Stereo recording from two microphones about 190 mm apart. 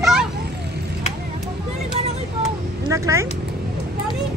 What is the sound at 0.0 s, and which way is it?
Vehicle, centre (ahead or behind).